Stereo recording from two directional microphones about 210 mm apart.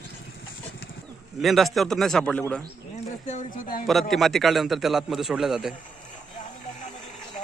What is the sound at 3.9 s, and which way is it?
Speech, centre (ahead or behind).